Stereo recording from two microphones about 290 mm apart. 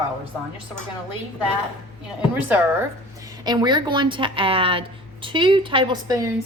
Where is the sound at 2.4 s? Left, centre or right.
Centre.